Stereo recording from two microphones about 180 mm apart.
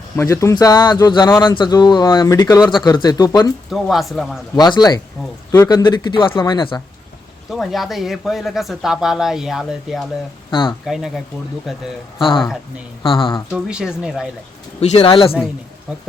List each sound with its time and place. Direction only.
0.2 s speech: 15° left (ahead or behind)
3.7 s speech: centre (ahead or behind)
4.5 s speech: 20° left (ahead or behind)
7.5 s speech: centre (ahead or behind)
10.5 s speech: 25° left (ahead or behind)
10.8 s speech: centre (ahead or behind)
13.0 s speech: 30° left (ahead or behind)
13.5 s speech: 5° right (ahead or behind)
14.8 s speech: 30° left (ahead or behind)
15.9 s speech: 5° right (ahead or behind)